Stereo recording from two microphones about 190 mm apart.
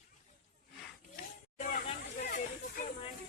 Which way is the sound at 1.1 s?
40° left (ahead or behind).